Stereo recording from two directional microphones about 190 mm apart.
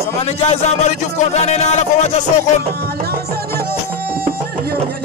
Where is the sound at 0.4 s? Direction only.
35° left (ahead or behind).